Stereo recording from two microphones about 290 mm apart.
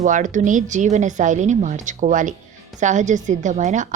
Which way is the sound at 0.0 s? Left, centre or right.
Right.